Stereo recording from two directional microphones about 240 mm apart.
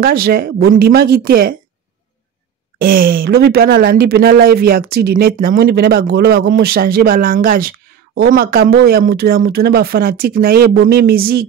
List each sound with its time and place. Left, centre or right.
0.0 s speech: right
2.8 s speech: right